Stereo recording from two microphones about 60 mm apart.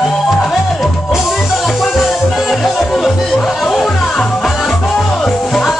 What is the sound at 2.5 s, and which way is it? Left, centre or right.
Music, centre.